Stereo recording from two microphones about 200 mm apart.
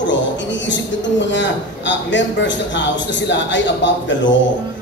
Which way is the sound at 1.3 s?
65° left (ahead or behind).